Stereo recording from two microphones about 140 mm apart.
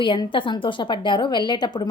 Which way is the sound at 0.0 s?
35° left (ahead or behind).